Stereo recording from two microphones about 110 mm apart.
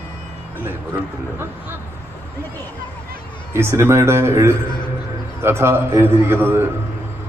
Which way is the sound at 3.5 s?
25° right (ahead or behind).